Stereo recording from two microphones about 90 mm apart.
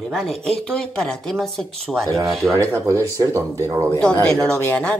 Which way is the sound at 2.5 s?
30° right (ahead or behind).